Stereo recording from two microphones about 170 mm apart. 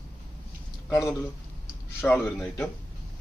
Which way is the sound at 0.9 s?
20° left (ahead or behind).